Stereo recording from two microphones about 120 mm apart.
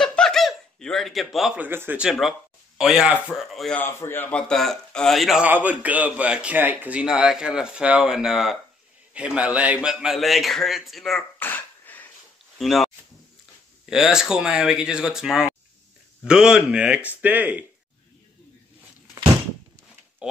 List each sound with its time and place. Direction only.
0.0 s chuckle: 5° left (ahead or behind)
1.6 s a man's voice: 15° right (ahead or behind); by 3.7 s centre (ahead or behind)
3.7 s a man's voice: 15° left (ahead or behind); by 5.4 s centre (ahead or behind)
5.4 s a man's voice: 10° right (ahead or behind)
11.3 s throat clearing: 15° left (ahead or behind)
12.5 s a man's voice: centre (ahead or behind)